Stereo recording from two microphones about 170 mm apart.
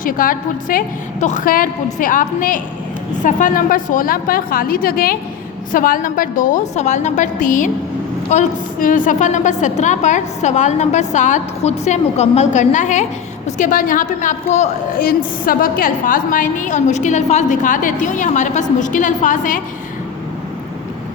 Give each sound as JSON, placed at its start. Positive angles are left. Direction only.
{"t": 0.0, "sound": "a woman's voice", "side_deg": 55}
{"t": 15.0, "sound": "a woman's voice", "side_deg": 60}